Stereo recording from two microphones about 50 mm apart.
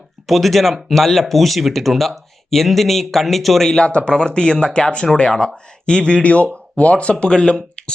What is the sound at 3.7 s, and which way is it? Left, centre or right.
Speech, left.